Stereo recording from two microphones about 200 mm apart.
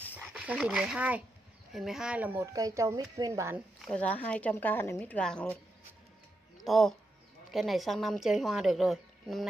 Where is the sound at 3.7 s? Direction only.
5° left (ahead or behind).